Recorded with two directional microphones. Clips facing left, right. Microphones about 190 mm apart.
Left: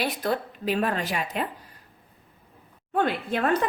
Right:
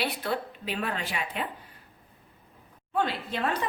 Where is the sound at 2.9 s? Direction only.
50° left (ahead or behind).